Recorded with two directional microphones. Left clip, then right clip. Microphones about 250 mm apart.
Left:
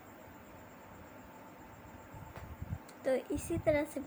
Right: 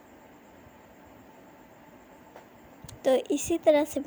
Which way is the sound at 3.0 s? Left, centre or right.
Right.